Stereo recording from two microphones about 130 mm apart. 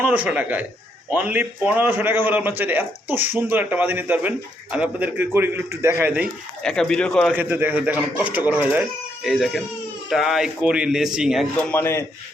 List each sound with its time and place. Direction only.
0.0 s a man's voice: 10° right (ahead or behind)
6.6 s speech: 5° left (ahead or behind)
7.3 s a man's voice: 15° right (ahead or behind)
9.2 s speech: centre (ahead or behind)
11.5 s speech: 15° left (ahead or behind)